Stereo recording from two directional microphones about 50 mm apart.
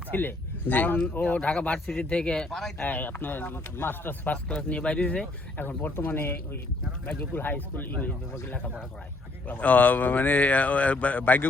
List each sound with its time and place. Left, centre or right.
0.1 s a man's voice: left; by 2.8 s centre
2.8 s speech: left
4.4 s speech: left
5.5 s a man's voice: left
7.0 s speech: left
9.5 s speech: left